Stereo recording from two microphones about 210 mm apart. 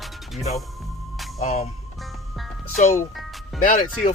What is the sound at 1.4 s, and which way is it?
Speech, 30° left (ahead or behind).